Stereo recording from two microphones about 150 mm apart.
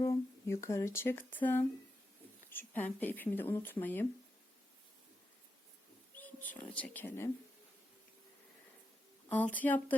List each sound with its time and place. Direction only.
0.0 s speech: 20° left (ahead or behind)
6.1 s speech: 10° left (ahead or behind)
9.3 s speech: 10° left (ahead or behind)